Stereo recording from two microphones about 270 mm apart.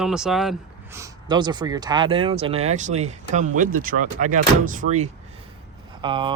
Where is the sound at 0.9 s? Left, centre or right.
Centre.